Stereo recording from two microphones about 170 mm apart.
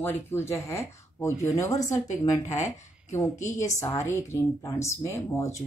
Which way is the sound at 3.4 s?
45° left (ahead or behind).